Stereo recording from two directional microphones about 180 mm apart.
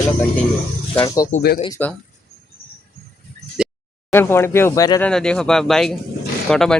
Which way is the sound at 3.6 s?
5° right (ahead or behind).